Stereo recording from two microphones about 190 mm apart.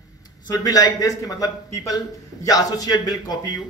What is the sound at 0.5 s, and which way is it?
A man's voice, 20° left (ahead or behind).